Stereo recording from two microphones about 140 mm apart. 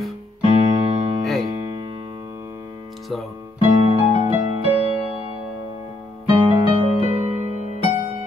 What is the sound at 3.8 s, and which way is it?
Music, 45° right (ahead or behind).